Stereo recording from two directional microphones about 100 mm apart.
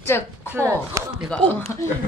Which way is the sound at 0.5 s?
30° right (ahead or behind).